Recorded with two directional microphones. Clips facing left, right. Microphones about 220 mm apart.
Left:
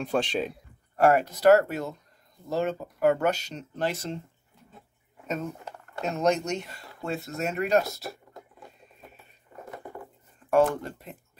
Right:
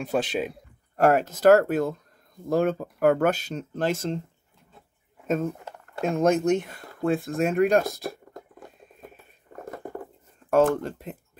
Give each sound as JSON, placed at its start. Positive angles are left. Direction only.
{"t": 0.0, "sound": "speech", "side_deg": -5}
{"t": 0.9, "sound": "speech", "side_deg": -45}
{"t": 6.0, "sound": "speech", "side_deg": -50}
{"t": 9.5, "sound": "a sound", "side_deg": -45}
{"t": 10.5, "sound": "speech", "side_deg": -40}